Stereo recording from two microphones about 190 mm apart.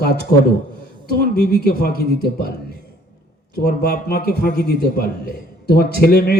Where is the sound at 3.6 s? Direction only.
55° left (ahead or behind).